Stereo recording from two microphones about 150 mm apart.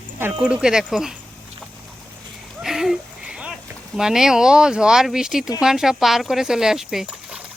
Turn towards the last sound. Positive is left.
turn(degrees=-5)  # may be behind; listen again after turning